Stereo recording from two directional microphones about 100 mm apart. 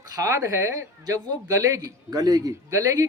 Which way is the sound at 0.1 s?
35° right (ahead or behind).